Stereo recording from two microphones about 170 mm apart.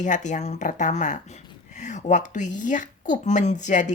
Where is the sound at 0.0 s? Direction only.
45° left (ahead or behind).